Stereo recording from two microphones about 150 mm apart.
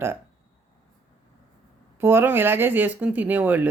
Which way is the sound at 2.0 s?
15° right (ahead or behind).